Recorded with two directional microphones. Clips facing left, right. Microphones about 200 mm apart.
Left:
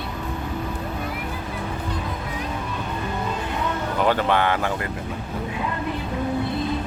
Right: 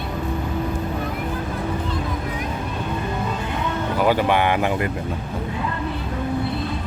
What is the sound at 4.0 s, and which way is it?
Speech, 10° right (ahead or behind).